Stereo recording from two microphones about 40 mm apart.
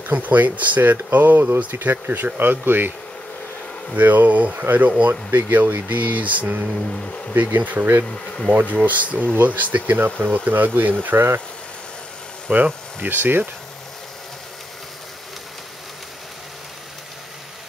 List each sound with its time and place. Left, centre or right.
0.1 s speech: right
3.9 s speech: right
11.1 s speech: right
12.5 s speech: right